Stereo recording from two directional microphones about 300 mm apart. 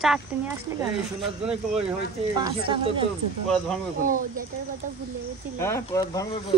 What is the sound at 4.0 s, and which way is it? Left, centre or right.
Speech, right.